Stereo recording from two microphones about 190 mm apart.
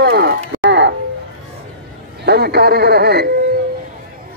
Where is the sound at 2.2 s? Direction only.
60° right (ahead or behind).